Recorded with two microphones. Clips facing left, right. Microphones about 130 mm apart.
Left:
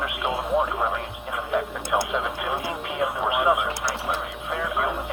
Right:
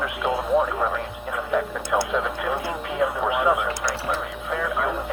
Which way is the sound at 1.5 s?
15° left (ahead or behind).